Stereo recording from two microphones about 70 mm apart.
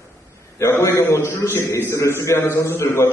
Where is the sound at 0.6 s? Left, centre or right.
Left.